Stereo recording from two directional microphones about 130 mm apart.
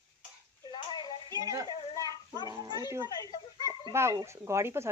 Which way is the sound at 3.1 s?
35° left (ahead or behind).